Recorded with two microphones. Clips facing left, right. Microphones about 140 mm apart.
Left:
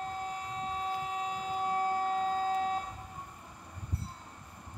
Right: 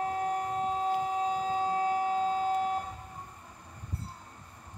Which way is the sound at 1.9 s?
10° right (ahead or behind).